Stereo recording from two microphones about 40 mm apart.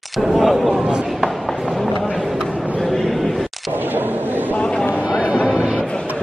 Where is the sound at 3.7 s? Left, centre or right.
Right.